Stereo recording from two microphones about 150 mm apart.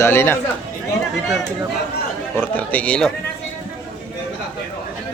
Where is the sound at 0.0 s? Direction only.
15° left (ahead or behind).